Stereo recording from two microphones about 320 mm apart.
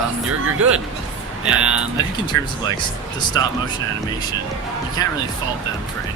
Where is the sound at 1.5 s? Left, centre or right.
Centre.